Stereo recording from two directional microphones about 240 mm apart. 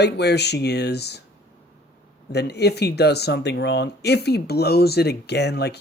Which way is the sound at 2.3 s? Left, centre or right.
Left.